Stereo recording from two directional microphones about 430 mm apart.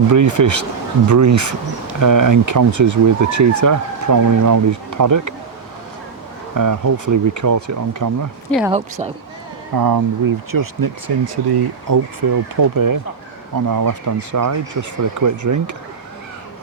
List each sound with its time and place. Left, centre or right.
0.1 s speech: right
6.5 s speech: right
8.5 s speech: centre
9.7 s speech: right
11.0 s speech: right
12.5 s speech: right